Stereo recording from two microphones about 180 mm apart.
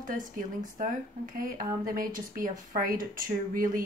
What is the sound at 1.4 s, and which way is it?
A woman's voice, 50° right (ahead or behind).